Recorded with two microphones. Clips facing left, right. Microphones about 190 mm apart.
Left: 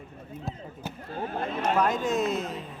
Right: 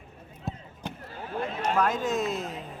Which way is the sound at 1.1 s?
50° left (ahead or behind).